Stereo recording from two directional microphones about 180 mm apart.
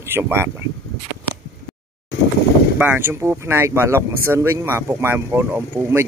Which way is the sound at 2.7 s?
10° right (ahead or behind).